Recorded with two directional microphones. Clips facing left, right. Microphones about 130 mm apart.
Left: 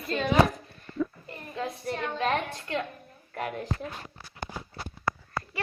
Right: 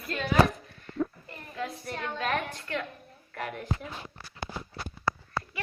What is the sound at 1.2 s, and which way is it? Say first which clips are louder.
A woman's voice: left 2 dB; 30° left (ahead or behind).